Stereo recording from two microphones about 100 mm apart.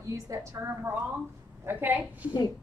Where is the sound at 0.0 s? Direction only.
30° right (ahead or behind).